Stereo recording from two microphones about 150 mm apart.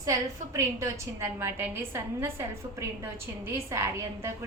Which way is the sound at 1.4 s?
15° right (ahead or behind).